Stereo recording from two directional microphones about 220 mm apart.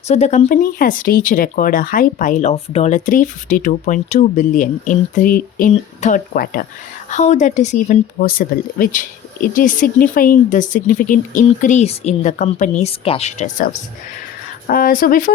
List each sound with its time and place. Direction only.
0.1 s speech: 30° left (ahead or behind)